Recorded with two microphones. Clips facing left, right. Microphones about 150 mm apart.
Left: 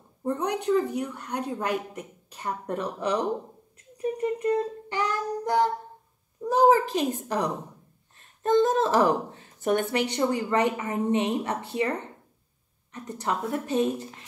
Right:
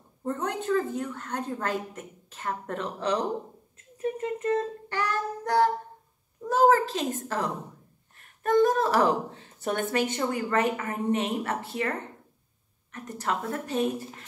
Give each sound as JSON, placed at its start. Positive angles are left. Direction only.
{"t": 0.2, "sound": "a woman's voice", "side_deg": 15}
{"t": 4.0, "sound": "child singing", "side_deg": 15}
{"t": 6.4, "sound": "a woman's voice", "side_deg": 15}